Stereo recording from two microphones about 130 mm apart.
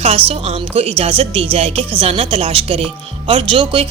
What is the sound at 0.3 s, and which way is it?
Speech, 50° right (ahead or behind).